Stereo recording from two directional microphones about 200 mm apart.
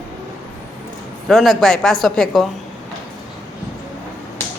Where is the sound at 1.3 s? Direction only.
Centre (ahead or behind).